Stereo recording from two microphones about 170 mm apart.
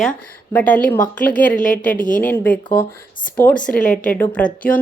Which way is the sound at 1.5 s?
50° left (ahead or behind).